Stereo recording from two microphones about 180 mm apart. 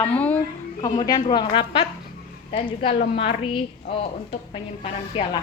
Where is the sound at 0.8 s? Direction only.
20° left (ahead or behind).